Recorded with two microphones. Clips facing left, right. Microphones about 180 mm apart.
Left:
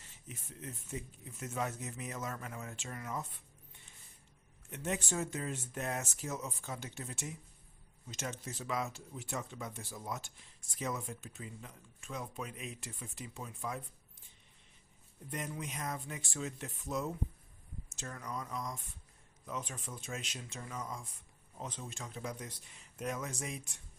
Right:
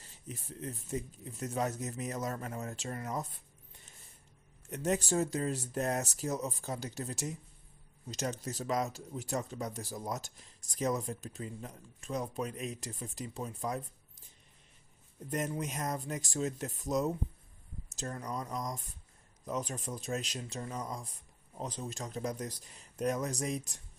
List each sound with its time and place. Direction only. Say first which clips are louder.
0.0 s speech: right 5 dB; 35° right (ahead or behind)
4.7 s speech: right 6 dB; 40° right (ahead or behind)
15.3 s speech: right 6 dB; 45° right (ahead or behind)